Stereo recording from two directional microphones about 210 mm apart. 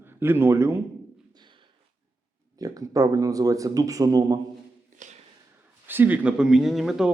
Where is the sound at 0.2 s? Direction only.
10° right (ahead or behind).